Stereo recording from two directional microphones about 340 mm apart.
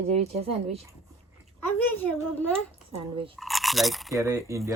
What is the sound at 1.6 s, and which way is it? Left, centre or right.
Speech, centre.